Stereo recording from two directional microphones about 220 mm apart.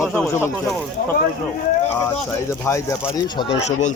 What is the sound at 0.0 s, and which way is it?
Speech, 10° left (ahead or behind).